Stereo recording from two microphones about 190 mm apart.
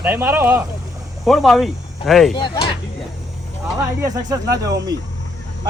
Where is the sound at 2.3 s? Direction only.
25° left (ahead or behind).